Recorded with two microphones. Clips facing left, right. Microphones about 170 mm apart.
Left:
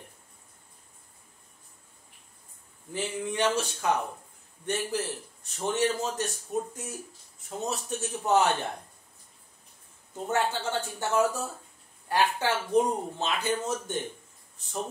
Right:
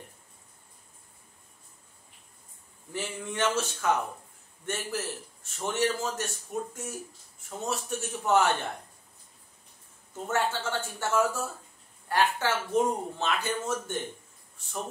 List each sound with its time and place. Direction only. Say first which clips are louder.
2.9 s a man's voice: left 3 dB; 15° left (ahead or behind)
10.2 s speech: left 1 dB; 15° left (ahead or behind)